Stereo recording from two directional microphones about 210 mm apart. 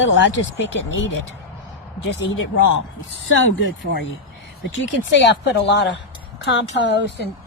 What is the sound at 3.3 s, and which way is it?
Speech, 65° left (ahead or behind).